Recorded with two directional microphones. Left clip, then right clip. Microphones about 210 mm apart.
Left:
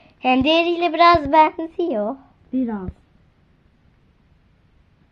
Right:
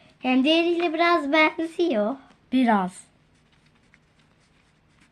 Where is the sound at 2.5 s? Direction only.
60° right (ahead or behind).